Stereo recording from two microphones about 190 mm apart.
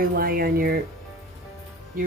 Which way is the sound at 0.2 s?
50° right (ahead or behind).